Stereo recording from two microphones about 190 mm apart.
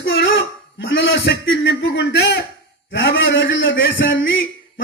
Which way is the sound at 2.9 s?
85° left.